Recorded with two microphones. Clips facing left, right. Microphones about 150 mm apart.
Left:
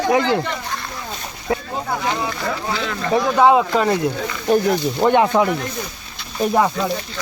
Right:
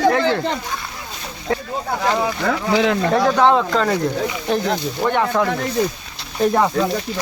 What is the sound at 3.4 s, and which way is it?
Speech, 10° left (ahead or behind).